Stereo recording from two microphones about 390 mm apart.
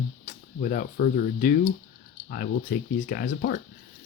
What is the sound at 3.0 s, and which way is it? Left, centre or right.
Speech, left.